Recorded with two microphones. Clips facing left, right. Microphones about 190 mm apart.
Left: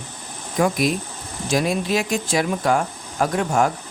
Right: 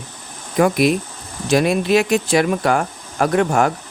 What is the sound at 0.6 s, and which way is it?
Speech, 70° right (ahead or behind).